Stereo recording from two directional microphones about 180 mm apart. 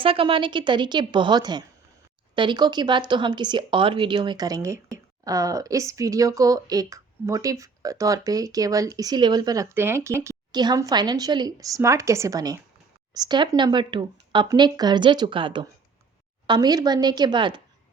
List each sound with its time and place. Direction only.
0.0 s a woman's voice: 30° right (ahead or behind)